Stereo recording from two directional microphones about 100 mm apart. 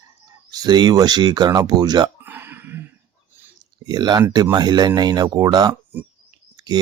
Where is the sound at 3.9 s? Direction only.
45° right (ahead or behind).